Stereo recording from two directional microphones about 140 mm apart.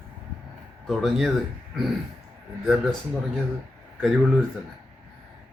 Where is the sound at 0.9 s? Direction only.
Centre (ahead or behind).